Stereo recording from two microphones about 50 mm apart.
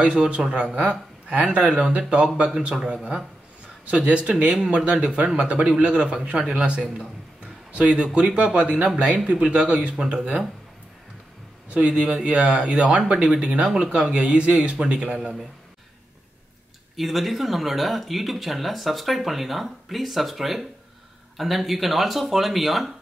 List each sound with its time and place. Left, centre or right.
0.0 s speech: centre
11.7 s speech: centre
16.9 s speech: centre